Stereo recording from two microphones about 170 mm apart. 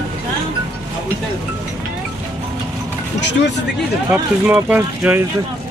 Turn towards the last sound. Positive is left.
turn(degrees=-10)  # may be behind; listen again after turning